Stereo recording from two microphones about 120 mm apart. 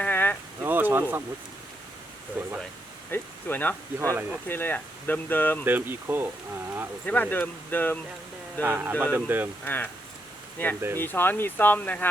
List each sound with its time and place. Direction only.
0.0 s a sound: 15° left (ahead or behind)
0.6 s a sound: 15° right (ahead or behind)
2.4 s speech: 10° right (ahead or behind)
3.1 s speech: 15° left (ahead or behind)
4.1 s speech: 15° right (ahead or behind)
4.4 s speech: 15° left (ahead or behind)
5.6 s speech: 15° right (ahead or behind)
7.0 s speech: 15° left (ahead or behind)
8.6 s speech: 20° right (ahead or behind)
9.6 s speech: 15° left (ahead or behind)